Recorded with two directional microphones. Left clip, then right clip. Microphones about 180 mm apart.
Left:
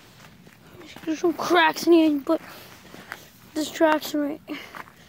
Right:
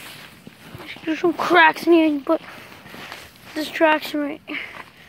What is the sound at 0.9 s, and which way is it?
Speech, centre (ahead or behind).